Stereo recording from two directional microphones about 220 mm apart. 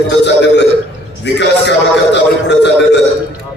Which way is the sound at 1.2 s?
50° left (ahead or behind).